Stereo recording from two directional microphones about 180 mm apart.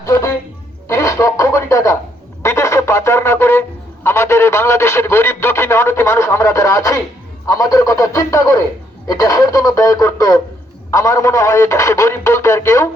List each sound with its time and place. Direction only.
0.0 s music: 15° left (ahead or behind)
0.9 s radio: 15° left (ahead or behind)
2.4 s a sound: 15° left (ahead or behind)
7.4 s speech: 15° left (ahead or behind)